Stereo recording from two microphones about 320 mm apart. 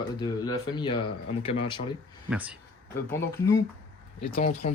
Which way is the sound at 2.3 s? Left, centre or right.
Centre.